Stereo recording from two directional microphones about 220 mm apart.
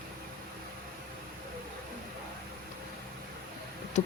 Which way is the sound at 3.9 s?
30° left (ahead or behind).